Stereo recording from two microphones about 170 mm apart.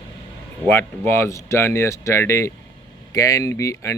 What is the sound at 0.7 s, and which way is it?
Speech, 15° left (ahead or behind).